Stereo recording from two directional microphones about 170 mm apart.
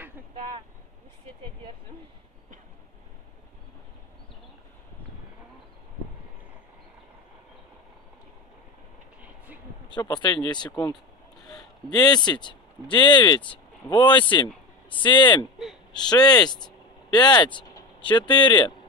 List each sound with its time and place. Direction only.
9.8 s speech: 25° left (ahead or behind)